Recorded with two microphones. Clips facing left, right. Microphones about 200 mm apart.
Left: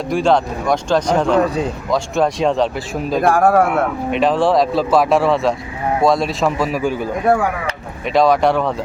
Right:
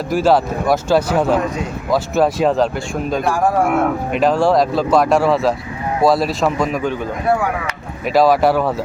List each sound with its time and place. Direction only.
0.1 s speech: 5° right (ahead or behind)
3.2 s speech: 60° left (ahead or behind)
4.1 s speech: centre (ahead or behind)